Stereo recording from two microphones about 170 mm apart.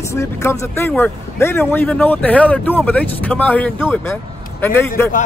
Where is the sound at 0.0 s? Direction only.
15° left (ahead or behind).